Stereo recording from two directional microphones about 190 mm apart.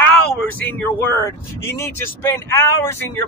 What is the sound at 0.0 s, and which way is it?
Speech, 10° left (ahead or behind).